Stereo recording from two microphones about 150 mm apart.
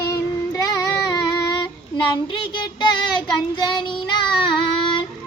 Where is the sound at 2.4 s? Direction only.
30° left (ahead or behind).